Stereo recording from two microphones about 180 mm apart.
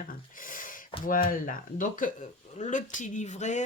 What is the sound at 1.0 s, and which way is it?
Speech, 50° left (ahead or behind).